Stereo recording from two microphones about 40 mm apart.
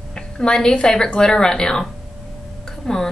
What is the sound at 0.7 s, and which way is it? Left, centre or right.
A woman's voice, left.